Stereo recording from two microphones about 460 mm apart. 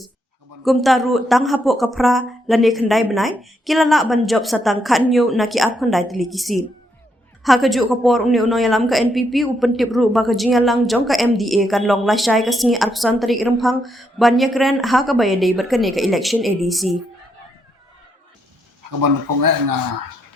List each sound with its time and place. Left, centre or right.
0.6 s speech: centre
18.9 s speech: right